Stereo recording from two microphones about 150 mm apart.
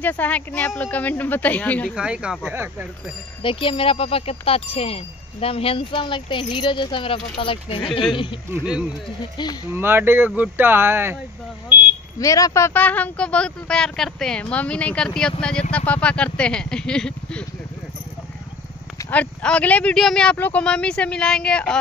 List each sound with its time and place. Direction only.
0.0 s speech: 10° left (ahead or behind)
2.0 s speech: 5° right (ahead or behind)
2.5 s speech: 15° right (ahead or behind)
3.4 s speech: 35° left (ahead or behind)
9.7 s speech: 15° right (ahead or behind)
12.2 s speech: 20° left (ahead or behind); by 17.5 s 5° left (ahead or behind)
18.9 s speech: 10° left (ahead or behind)